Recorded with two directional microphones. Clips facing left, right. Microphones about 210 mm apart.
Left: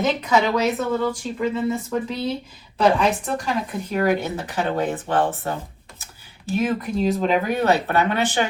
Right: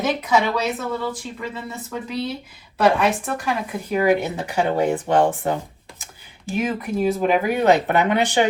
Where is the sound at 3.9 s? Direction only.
10° right (ahead or behind).